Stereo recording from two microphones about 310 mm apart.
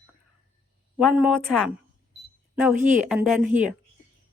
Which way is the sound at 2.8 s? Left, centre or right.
Right.